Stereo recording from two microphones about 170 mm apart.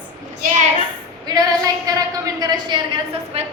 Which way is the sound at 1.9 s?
20° right (ahead or behind).